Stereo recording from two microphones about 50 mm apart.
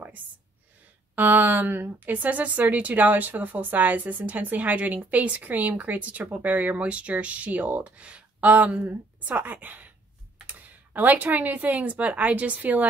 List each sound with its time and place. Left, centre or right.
1.1 s a woman's voice: right